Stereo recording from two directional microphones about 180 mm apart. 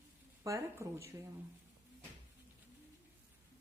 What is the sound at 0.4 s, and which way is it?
Speech, 15° right (ahead or behind).